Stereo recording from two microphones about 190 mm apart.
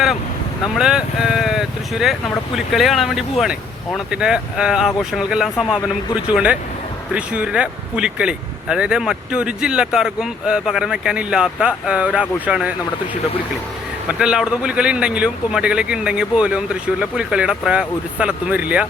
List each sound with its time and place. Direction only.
0.8 s speech: 5° right (ahead or behind)
14.1 s speech: 5° right (ahead or behind)